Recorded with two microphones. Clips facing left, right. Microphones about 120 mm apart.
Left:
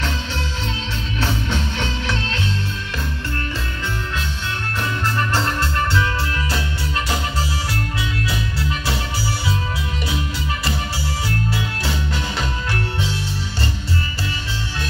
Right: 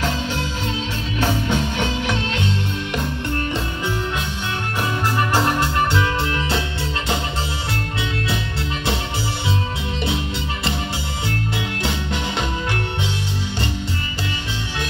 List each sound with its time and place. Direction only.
1.2 s music: 45° right (ahead or behind)
2.0 s music: 20° right (ahead or behind)
5.1 s music: 15° right (ahead or behind)